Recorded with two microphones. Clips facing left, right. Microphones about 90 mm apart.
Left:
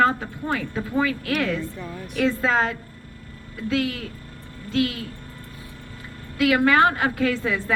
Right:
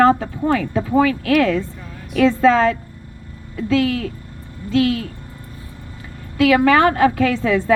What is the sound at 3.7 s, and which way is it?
Speech, 90° right.